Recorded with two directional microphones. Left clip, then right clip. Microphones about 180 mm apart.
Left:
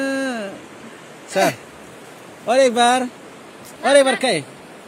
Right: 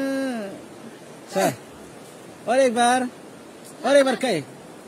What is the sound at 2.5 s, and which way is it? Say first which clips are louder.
Speech: left 4 dB; 10° left (ahead or behind).